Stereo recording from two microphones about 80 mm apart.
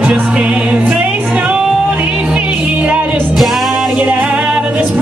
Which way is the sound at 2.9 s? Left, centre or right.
Centre.